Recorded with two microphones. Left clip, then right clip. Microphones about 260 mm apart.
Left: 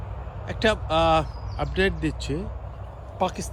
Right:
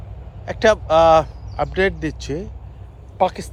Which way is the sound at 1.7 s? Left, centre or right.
Centre.